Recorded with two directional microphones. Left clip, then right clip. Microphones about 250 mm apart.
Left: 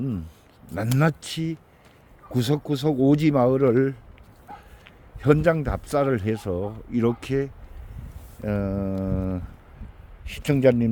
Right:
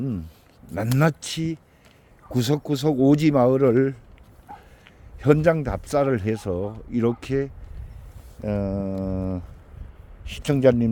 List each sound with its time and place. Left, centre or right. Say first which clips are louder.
0.0 s a sound: right 1 dB; centre
0.7 s speech: right 1 dB; centre
5.2 s speech: right 1 dB; centre